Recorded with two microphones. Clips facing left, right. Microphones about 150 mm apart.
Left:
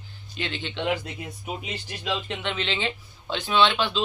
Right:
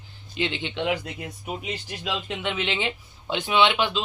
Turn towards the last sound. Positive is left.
turn(degrees=-15)  # may be behind; listen again after turning